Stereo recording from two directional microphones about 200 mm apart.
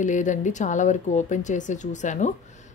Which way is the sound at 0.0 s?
40° left (ahead or behind).